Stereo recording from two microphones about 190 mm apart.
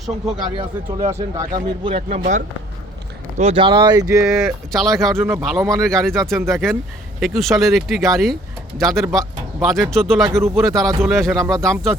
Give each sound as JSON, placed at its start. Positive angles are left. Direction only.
{"t": 0.5, "sound": "speech", "side_deg": -25}
{"t": 4.3, "sound": "speech", "side_deg": 0}